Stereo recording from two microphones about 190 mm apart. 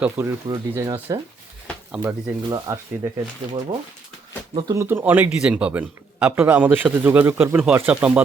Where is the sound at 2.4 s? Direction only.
20° right (ahead or behind).